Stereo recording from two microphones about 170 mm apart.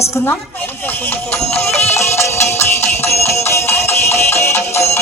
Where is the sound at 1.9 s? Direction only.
15° left (ahead or behind).